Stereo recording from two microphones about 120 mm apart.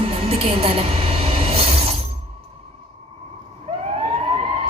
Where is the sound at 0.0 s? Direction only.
55° right (ahead or behind).